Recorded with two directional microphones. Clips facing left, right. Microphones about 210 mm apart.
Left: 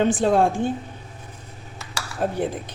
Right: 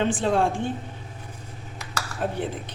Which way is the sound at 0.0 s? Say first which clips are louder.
Left 4 dB; 40° left (ahead or behind).